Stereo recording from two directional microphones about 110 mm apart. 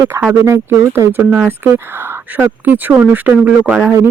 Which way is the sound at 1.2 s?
10° right (ahead or behind).